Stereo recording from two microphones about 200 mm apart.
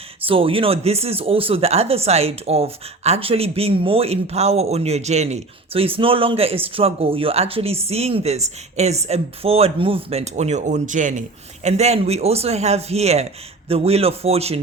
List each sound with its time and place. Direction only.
0.3 s speech: 25° right (ahead or behind)